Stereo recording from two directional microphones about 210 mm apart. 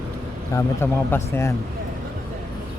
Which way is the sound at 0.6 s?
10° left (ahead or behind).